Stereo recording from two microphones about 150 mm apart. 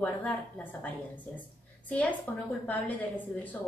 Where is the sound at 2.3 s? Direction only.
10° left (ahead or behind).